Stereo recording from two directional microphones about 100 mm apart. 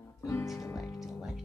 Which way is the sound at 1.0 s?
Centre (ahead or behind).